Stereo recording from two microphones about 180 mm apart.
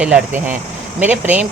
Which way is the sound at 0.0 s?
10° right (ahead or behind).